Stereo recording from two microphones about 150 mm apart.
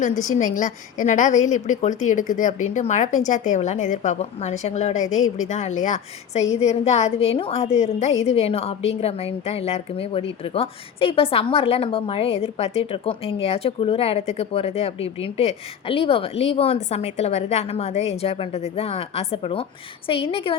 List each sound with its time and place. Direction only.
0.2 s a woman's voice: 55° left (ahead or behind); by 20.6 s 40° left (ahead or behind)